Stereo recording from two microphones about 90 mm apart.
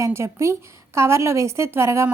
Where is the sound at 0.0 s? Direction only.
30° right (ahead or behind).